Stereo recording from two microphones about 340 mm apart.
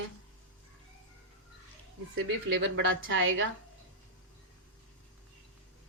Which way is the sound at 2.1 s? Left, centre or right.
Right.